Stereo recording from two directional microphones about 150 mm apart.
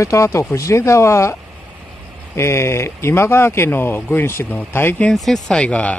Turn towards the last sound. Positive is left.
turn(degrees=10)  # may be behind; listen again after turning